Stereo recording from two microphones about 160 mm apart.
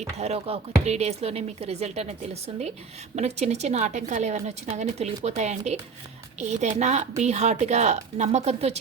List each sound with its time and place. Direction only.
0.2 s a woman's voice: 40° right (ahead or behind)